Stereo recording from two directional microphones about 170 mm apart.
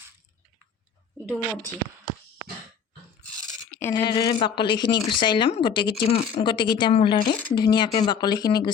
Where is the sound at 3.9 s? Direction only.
25° left (ahead or behind).